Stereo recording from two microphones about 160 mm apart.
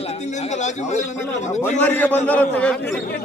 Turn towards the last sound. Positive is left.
turn(degrees=10)  # may be behind; listen again after turning